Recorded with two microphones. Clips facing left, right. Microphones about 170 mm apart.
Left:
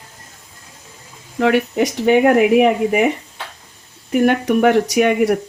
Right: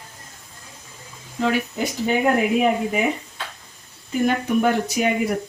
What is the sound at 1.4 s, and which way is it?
Speech, 70° left (ahead or behind).